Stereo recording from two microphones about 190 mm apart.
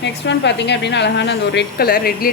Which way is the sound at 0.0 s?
65° left (ahead or behind).